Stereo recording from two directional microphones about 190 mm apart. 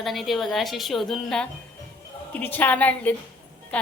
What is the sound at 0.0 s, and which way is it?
A woman's voice, centre (ahead or behind).